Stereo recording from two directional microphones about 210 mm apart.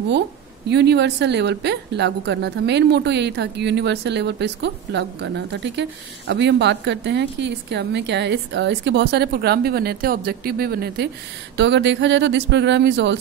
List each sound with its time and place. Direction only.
0.7 s a woman's voice: 55° right (ahead or behind)